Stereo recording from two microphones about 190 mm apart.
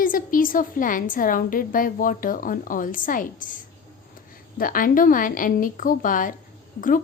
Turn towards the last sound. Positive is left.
turn(degrees=45)  # may be behind; listen again after turning